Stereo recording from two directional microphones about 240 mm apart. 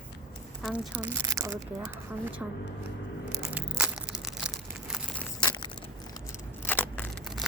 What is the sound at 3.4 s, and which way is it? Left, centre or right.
Crushing, centre.